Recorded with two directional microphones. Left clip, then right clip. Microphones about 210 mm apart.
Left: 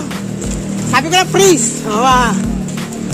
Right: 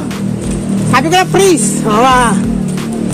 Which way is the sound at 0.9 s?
15° right (ahead or behind).